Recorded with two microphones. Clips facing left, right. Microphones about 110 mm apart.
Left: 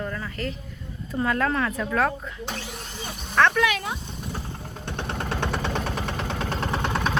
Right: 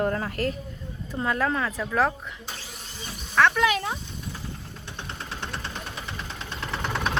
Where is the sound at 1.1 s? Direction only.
20° right (ahead or behind).